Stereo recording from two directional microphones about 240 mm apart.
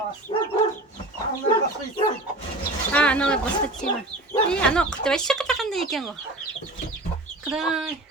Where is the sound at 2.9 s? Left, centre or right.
Centre.